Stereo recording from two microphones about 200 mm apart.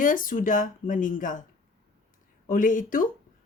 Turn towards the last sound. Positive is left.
turn(degrees=40)  # may be behind; listen again after turning